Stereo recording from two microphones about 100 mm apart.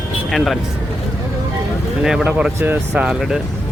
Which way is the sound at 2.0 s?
5° right (ahead or behind).